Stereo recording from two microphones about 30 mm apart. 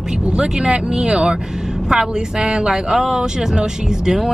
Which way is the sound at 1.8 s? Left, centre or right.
Centre.